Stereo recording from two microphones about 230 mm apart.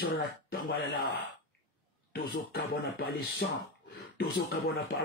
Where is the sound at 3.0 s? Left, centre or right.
Left.